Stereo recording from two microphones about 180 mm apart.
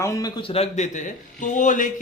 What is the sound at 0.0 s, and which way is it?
A man's voice, 20° left (ahead or behind).